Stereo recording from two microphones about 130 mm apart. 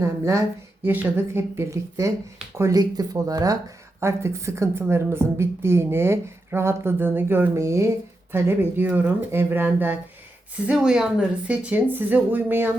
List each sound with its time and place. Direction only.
0.0 s a woman's voice: 20° right (ahead or behind)